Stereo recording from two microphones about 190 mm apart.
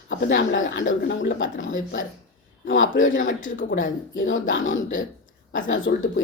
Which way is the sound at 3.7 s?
90° left.